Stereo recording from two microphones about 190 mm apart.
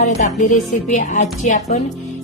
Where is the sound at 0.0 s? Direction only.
40° left (ahead or behind).